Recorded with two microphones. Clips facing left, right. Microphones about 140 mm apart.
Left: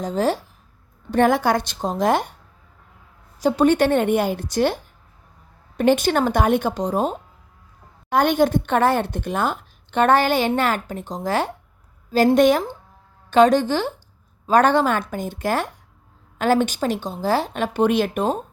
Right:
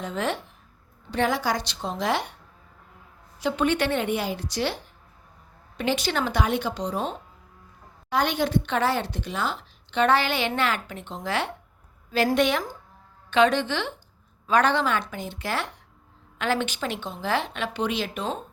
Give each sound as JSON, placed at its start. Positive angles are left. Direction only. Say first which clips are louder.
{"t": 0.0, "sound": "speech", "louder": "left 7 dB", "side_deg": 40}
{"t": 1.1, "sound": "speech", "louder": "left 7 dB", "side_deg": 50}
{"t": 3.4, "sound": "speech", "louder": "left 7 dB", "side_deg": 40}